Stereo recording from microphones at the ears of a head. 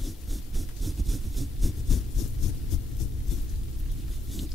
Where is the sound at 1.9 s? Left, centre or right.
Left.